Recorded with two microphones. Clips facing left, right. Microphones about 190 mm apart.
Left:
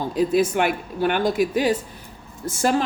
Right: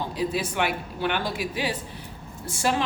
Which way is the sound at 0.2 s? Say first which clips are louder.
Left 8 dB; 45° left (ahead or behind).